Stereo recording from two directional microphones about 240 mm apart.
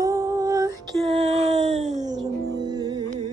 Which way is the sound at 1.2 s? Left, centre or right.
Right.